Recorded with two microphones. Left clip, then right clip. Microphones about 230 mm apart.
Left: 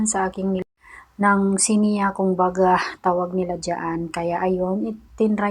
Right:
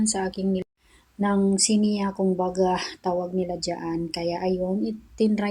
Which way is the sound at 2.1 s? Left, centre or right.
Centre.